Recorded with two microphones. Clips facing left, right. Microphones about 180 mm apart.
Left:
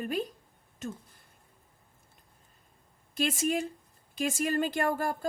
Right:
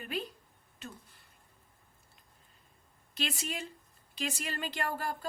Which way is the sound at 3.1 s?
45° left (ahead or behind).